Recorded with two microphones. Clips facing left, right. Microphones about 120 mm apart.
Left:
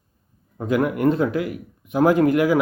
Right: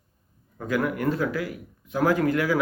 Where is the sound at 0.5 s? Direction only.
20° left (ahead or behind).